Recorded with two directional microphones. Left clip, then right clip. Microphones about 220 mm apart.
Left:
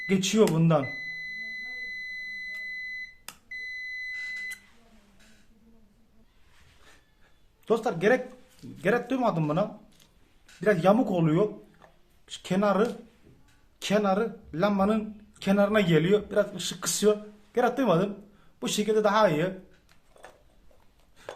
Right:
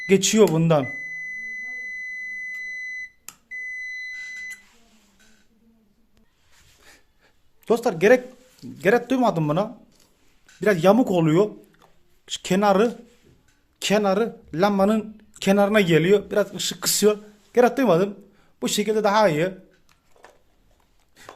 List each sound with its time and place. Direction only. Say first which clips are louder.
0.1 s speech: right 7 dB; 35° right (ahead or behind)
7.6 s speech: right 6 dB; 35° right (ahead or behind)
21.2 s a sound: left 2 dB; 35° right (ahead or behind)